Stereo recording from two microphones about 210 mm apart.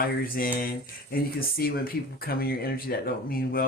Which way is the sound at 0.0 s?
45° left (ahead or behind).